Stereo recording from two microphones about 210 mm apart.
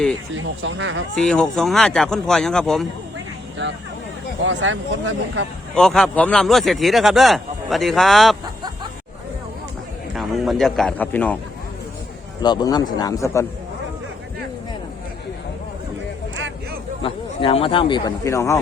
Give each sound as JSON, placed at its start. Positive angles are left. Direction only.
{"t": 0.3, "sound": "speech", "side_deg": -65}
{"t": 1.1, "sound": "speech", "side_deg": 5}
{"t": 4.4, "sound": "speech", "side_deg": -65}
{"t": 5.7, "sound": "speech", "side_deg": 0}
{"t": 10.2, "sound": "speech", "side_deg": 0}
{"t": 12.4, "sound": "speech", "side_deg": 20}
{"t": 17.0, "sound": "speech", "side_deg": 25}